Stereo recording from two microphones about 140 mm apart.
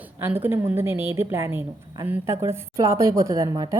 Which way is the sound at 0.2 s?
15° right (ahead or behind).